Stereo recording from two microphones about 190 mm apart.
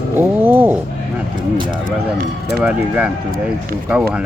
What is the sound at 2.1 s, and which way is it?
Speech, 55° right (ahead or behind).